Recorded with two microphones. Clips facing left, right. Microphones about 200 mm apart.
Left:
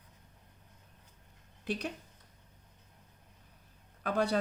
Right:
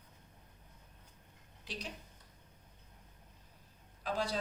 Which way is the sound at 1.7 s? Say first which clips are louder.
Left 9 dB; 55° left (ahead or behind).